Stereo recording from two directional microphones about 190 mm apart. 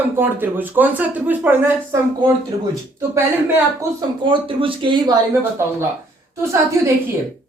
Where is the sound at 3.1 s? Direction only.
15° right (ahead or behind).